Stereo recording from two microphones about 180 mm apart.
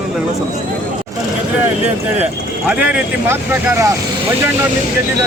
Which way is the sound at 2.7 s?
5° right (ahead or behind).